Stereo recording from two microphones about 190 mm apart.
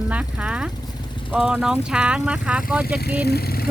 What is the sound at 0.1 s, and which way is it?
Speech, 5° right (ahead or behind).